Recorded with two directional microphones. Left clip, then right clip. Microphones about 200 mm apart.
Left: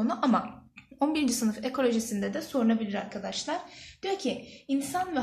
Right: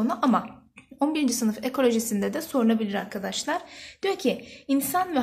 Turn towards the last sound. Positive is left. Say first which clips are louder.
# right 5 dB
turn(degrees=-50)  # may be behind; listen again after turning